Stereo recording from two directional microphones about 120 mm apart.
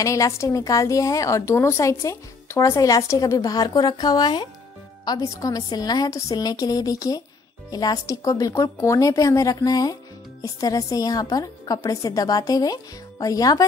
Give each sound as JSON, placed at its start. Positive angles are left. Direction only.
{"t": 0.0, "sound": "a woman's voice", "side_deg": 25}